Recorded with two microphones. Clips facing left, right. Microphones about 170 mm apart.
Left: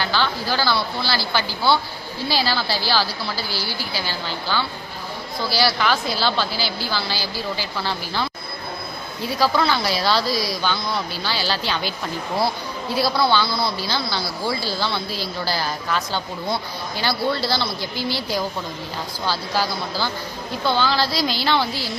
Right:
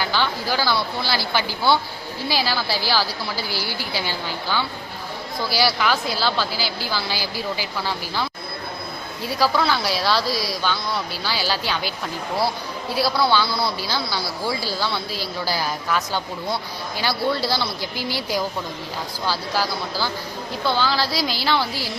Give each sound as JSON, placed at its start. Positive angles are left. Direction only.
{"t": 0.0, "sound": "speech", "side_deg": -15}
{"t": 9.4, "sound": "speech", "side_deg": -5}
{"t": 13.0, "sound": "speech", "side_deg": -5}